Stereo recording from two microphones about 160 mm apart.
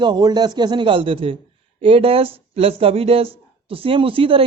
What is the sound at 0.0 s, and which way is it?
A man's voice, 25° right (ahead or behind).